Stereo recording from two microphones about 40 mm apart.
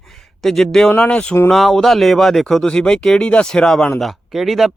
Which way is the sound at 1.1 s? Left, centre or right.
Left.